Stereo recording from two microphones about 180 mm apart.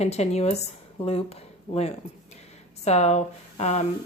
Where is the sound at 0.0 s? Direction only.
35° left (ahead or behind).